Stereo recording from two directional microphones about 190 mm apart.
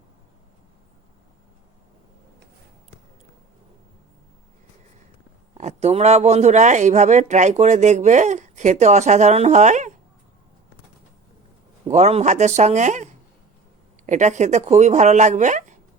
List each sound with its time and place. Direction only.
5.5 s speech: 35° right (ahead or behind)
11.9 s speech: 35° right (ahead or behind)
14.1 s speech: 40° right (ahead or behind)